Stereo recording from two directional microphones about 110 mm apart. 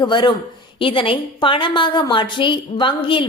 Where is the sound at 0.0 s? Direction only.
45° left (ahead or behind).